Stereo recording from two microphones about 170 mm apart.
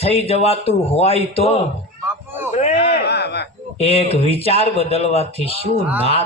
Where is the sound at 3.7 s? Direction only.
35° left (ahead or behind).